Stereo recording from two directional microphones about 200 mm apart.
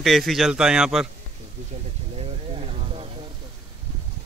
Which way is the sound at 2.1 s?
30° right (ahead or behind).